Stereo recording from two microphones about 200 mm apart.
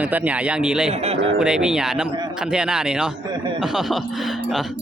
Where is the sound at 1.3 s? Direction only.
5° right (ahead or behind).